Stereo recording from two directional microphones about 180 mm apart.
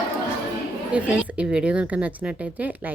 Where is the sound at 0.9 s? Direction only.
5° right (ahead or behind).